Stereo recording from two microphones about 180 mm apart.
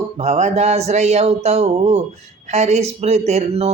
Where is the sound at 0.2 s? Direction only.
40° right (ahead or behind).